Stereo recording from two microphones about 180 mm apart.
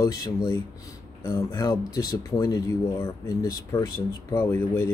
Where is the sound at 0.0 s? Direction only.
20° left (ahead or behind).